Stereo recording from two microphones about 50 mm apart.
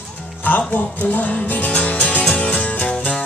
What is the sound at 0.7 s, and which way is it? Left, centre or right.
Music, left.